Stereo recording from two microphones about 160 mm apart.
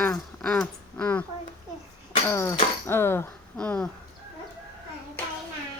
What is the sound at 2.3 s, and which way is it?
A woman's voice, 15° left (ahead or behind).